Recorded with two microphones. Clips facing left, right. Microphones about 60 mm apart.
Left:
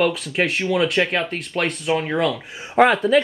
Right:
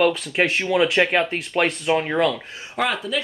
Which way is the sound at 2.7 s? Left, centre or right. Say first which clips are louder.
Left 8 dB; left.